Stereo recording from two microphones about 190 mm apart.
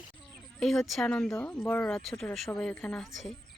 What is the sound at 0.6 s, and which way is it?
Speech, centre (ahead or behind).